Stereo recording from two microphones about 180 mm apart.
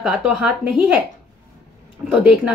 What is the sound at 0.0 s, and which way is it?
A woman's voice, 5° right (ahead or behind).